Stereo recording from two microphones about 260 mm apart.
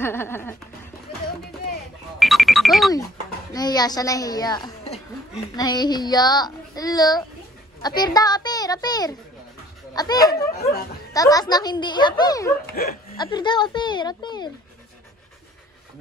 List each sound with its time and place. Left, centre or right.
0.0 s a woman's voice: centre
2.1 s music: centre
3.5 s a woman's voice: centre
12.6 s speech: left
13.2 s a woman's voice: centre